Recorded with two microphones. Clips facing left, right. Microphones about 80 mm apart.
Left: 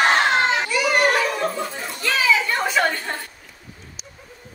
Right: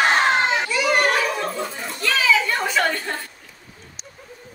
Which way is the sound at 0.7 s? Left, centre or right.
Centre.